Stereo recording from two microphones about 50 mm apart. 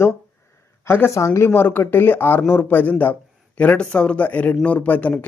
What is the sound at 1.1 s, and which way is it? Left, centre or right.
Speech, left.